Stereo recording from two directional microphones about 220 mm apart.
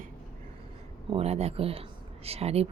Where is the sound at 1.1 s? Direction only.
30° right (ahead or behind).